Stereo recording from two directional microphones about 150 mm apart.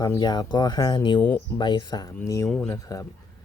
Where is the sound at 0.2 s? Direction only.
30° left (ahead or behind).